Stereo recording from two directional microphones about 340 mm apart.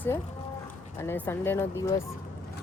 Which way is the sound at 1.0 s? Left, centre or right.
Centre.